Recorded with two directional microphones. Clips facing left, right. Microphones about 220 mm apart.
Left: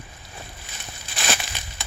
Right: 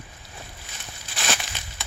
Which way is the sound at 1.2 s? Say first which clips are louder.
Left 1 dB; 10° left (ahead or behind).